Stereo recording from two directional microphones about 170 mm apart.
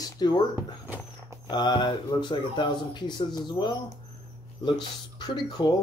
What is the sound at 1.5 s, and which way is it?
Speech, 25° left (ahead or behind).